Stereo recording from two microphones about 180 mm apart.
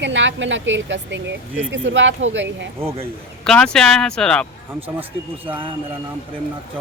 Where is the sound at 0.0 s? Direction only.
90° right.